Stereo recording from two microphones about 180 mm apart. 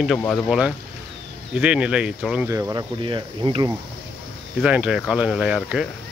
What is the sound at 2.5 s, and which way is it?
Speech, 20° right (ahead or behind).